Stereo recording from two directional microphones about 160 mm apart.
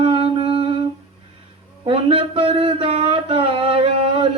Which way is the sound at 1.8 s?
35° right (ahead or behind).